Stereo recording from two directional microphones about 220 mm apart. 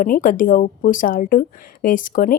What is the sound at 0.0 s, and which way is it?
Speech, 40° left (ahead or behind).